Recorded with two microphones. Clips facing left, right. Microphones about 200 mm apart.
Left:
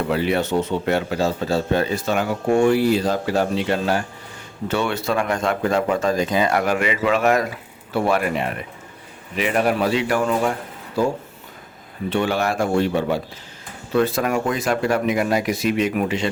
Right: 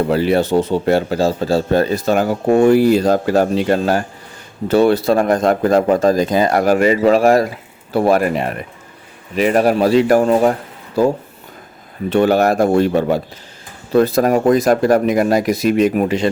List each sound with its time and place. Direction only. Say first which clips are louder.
0.0 s speech: right 6 dB; 35° right (ahead or behind)
12.1 s speech: right 8 dB; 40° right (ahead or behind)